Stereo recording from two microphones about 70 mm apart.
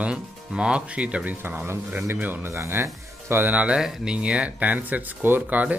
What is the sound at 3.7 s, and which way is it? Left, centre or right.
Speech, centre.